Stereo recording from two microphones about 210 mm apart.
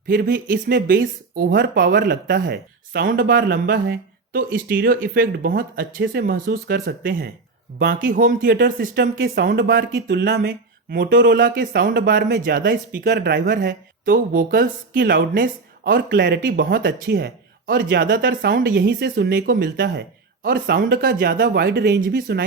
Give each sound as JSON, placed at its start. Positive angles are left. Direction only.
{"t": 0.1, "sound": "speech", "side_deg": -45}
{"t": 7.8, "sound": "speech", "side_deg": -55}
{"t": 8.1, "sound": "speech", "side_deg": -40}